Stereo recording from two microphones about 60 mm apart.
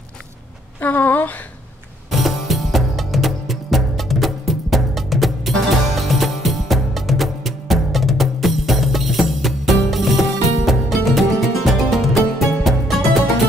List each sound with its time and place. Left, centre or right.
0.7 s a woman's voice: left
2.0 s music: centre